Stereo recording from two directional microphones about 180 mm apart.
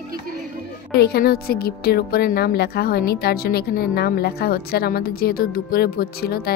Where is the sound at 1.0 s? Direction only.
60° left (ahead or behind).